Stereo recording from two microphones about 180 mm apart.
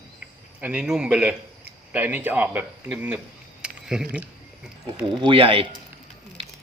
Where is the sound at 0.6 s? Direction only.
5° right (ahead or behind).